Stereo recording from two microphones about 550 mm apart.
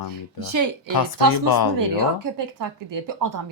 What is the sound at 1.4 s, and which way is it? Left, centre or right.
Speech, left.